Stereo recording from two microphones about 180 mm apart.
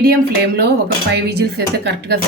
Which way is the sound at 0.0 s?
60° right (ahead or behind).